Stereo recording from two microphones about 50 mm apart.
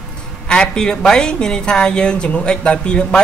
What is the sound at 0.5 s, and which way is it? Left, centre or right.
A woman's voice, centre.